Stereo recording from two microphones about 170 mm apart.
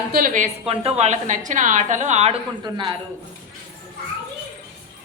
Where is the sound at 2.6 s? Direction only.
25° right (ahead or behind).